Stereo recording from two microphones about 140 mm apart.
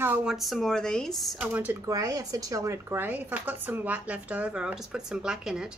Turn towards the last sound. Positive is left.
turn(degrees=-5)  # may be behind; listen again after turning